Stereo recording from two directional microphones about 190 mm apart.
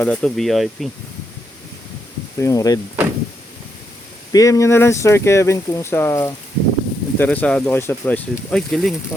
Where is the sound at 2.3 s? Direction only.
15° left (ahead or behind).